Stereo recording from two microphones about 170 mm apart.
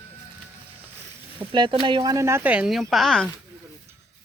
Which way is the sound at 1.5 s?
30° right (ahead or behind).